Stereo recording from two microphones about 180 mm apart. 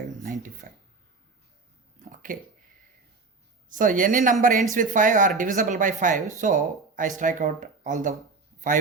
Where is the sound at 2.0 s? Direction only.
50° right (ahead or behind).